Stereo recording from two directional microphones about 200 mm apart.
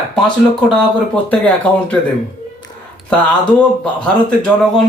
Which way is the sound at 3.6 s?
5° left (ahead or behind).